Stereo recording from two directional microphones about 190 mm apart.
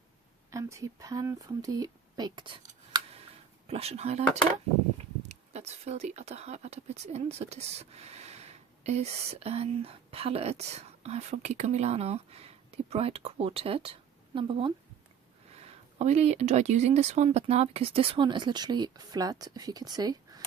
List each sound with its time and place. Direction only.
0.5 s speech: 15° right (ahead or behind)
2.9 s scissors: 20° right (ahead or behind)
3.7 s speech: 35° right (ahead or behind)
5.3 s speech: 35° right (ahead or behind); by 20.4 s 20° right (ahead or behind)